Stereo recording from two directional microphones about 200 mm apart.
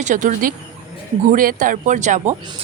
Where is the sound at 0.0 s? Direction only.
40° right (ahead or behind).